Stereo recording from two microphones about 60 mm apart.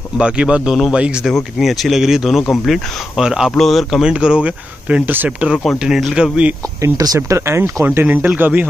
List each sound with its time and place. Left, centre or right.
0.2 s speech: centre
1.2 s speech: centre
3.5 s speech: centre
4.0 s speech: centre
5.1 s speech: right
6.1 s speech: centre
6.8 s speech: right
7.2 s speech: right
7.8 s speech: right